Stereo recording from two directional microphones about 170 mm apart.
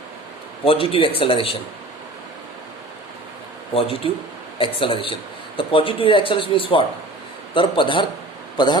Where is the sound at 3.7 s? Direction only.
30° left (ahead or behind).